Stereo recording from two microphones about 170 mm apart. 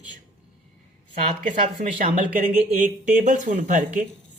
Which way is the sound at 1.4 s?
45° right (ahead or behind).